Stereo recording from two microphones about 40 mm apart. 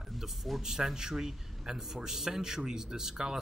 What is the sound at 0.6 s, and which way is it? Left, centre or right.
A man's voice, centre.